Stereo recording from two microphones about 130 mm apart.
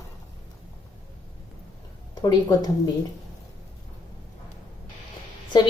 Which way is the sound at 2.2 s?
30° left (ahead or behind).